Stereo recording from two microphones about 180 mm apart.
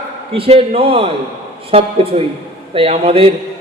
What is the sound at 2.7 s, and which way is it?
Speech, 35° right (ahead or behind).